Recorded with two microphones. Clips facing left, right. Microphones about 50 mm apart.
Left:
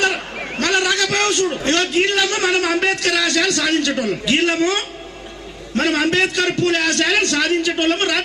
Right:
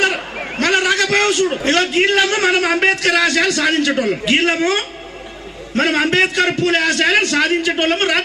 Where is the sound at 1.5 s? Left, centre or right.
Right.